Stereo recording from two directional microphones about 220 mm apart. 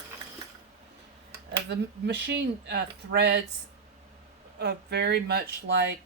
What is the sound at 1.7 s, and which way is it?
Speech, 50° right (ahead or behind).